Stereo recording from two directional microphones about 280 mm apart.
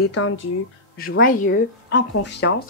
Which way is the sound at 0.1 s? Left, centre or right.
Left.